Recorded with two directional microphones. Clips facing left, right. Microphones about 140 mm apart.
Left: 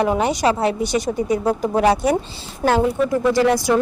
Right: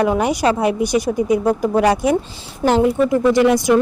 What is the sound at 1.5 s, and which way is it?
Speech, 10° left (ahead or behind).